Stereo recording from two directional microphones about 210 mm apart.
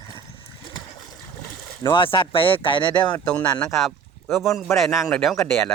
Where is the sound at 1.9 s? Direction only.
25° left (ahead or behind).